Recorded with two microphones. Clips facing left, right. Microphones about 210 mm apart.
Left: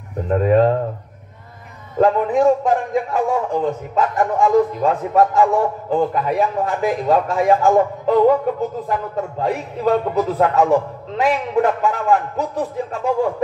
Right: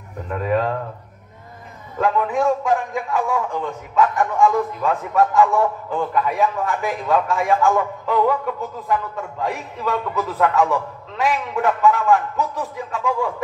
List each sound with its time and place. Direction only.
0.3 s a man's voice: 40° left (ahead or behind)
2.0 s a man's voice: 35° left (ahead or behind)